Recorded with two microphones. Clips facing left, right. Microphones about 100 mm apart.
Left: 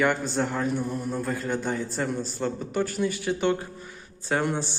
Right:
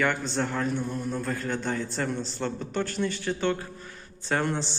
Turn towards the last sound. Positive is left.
turn(degrees=10)  # may be behind; listen again after turning